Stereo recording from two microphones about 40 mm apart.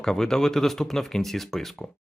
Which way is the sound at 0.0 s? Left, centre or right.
Centre.